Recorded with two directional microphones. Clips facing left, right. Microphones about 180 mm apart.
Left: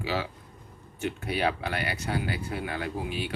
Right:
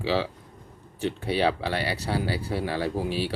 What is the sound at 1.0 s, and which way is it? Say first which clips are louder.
Speech: right 4 dB; 30° right (ahead or behind).